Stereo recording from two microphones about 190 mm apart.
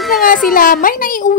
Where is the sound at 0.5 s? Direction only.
45° left (ahead or behind).